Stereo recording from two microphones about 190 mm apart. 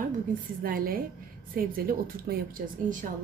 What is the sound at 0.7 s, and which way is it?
A woman's voice, 50° right (ahead or behind).